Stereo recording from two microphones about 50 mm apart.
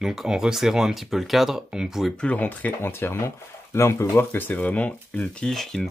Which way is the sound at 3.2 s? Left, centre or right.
Left.